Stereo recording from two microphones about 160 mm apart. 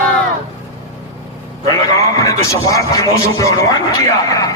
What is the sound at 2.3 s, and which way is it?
A man's voice, 20° left (ahead or behind).